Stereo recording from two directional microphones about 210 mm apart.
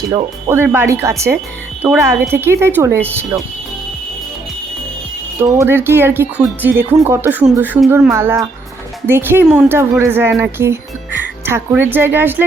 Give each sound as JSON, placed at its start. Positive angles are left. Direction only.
{"t": 0.1, "sound": "speech", "side_deg": -20}
{"t": 0.5, "sound": "speech", "side_deg": -10}
{"t": 5.4, "sound": "speech", "side_deg": -15}